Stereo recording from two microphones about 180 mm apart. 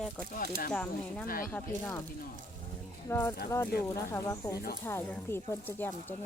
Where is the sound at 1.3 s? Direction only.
50° left (ahead or behind).